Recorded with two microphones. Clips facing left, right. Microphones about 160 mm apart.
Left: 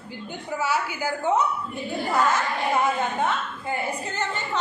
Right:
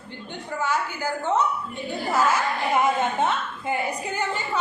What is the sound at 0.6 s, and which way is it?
Speech, 10° left (ahead or behind).